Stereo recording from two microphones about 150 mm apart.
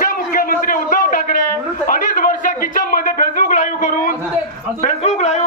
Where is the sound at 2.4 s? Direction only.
65° left (ahead or behind).